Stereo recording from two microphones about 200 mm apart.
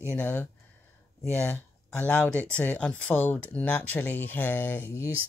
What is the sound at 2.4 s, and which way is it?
Speech, 5° left (ahead or behind).